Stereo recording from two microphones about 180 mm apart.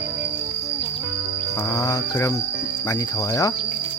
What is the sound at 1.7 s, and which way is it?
Music, 20° left (ahead or behind).